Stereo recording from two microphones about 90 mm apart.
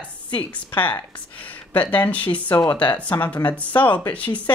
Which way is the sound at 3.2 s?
20° left (ahead or behind).